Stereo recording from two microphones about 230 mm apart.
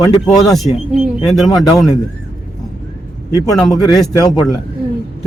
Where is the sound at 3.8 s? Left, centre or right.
Centre.